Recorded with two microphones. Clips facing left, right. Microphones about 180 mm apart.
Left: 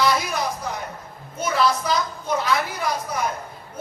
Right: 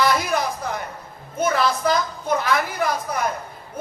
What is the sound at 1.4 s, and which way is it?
A woman's voice, 50° right (ahead or behind).